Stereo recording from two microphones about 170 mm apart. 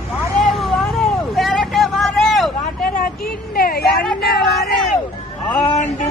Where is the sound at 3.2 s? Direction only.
60° left (ahead or behind).